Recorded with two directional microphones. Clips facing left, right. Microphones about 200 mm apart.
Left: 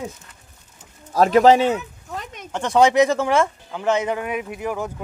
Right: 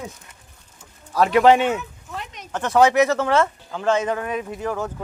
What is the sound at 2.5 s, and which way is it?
Speech, 15° left (ahead or behind).